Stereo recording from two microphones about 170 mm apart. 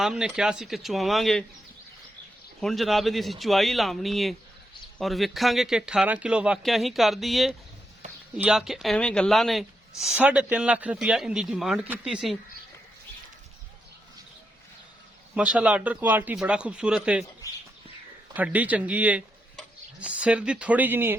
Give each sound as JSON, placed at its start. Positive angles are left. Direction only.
{"t": 0.0, "sound": "speech", "side_deg": -5}
{"t": 2.6, "sound": "speech", "side_deg": 0}
{"t": 15.4, "sound": "a man's voice", "side_deg": -5}
{"t": 18.3, "sound": "a man's voice", "side_deg": -10}